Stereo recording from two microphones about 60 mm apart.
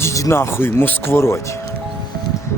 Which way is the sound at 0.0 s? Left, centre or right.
Left.